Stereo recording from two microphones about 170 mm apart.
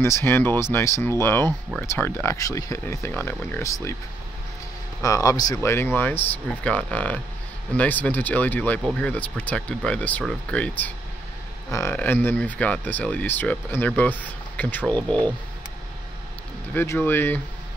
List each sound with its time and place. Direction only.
0.0 s speech: 15° left (ahead or behind)
5.0 s speech: 20° left (ahead or behind)
11.7 s speech: 15° left (ahead or behind)
16.7 s speech: 15° left (ahead or behind)